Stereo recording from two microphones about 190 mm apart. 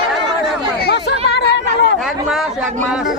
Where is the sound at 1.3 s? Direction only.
65° left (ahead or behind).